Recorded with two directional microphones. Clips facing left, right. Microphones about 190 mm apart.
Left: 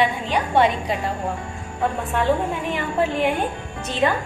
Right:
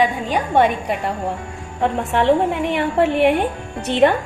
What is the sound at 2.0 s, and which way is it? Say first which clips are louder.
A woman's voice: right 6 dB; 75° right (ahead or behind).